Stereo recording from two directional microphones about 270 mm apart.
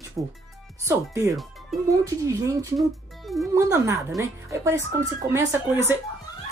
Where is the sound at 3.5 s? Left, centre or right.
Centre.